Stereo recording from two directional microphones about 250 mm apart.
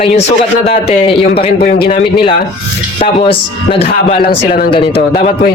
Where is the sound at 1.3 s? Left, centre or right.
Left.